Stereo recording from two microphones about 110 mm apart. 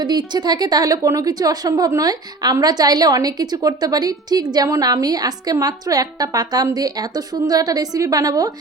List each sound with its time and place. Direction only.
0.0 s a woman's voice: 40° right (ahead or behind)